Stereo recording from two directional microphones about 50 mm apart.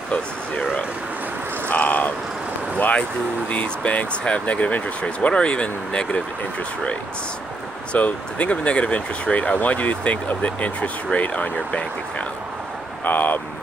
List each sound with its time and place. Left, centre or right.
1.7 s vehicle: left
2.8 s speech: left
7.9 s speech: left
13.0 s vehicle: left